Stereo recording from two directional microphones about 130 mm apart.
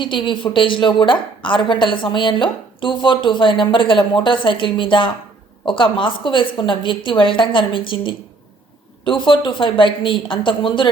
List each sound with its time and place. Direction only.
0.0 s a woman's voice: 40° left (ahead or behind)